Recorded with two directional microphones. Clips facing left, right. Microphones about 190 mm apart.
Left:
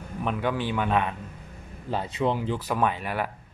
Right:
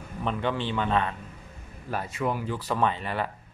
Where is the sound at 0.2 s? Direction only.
10° left (ahead or behind).